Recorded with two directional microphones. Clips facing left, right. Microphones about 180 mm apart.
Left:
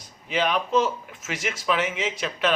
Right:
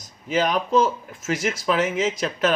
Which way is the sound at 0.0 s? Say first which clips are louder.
Right 3 dB; 40° right (ahead or behind).